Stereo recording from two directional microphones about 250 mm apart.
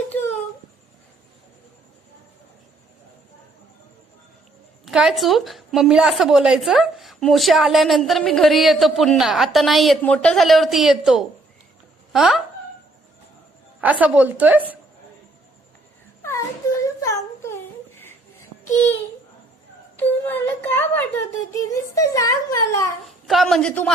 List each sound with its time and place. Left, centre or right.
4.9 s a woman's voice: centre
13.8 s a woman's voice: centre
16.2 s whimper: centre
20.0 s a child's voice: centre
23.0 s a woman's voice: centre